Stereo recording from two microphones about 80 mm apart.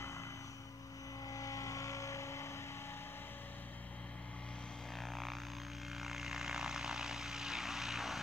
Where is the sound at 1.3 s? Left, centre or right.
Left.